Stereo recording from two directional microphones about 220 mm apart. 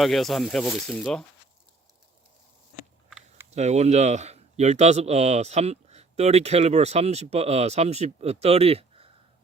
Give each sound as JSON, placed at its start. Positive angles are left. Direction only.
{"t": 0.0, "sound": "speech", "side_deg": 0}
{"t": 3.1, "sound": "a sound", "side_deg": 0}
{"t": 3.5, "sound": "speech", "side_deg": -30}